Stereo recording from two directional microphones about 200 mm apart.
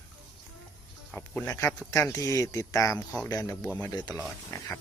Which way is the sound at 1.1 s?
10° left (ahead or behind).